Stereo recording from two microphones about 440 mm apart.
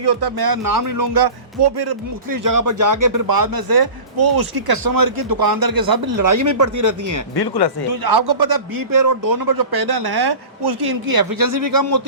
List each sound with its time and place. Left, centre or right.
0.0 s a man's voice: right
7.3 s speech: left
8.0 s a man's voice: right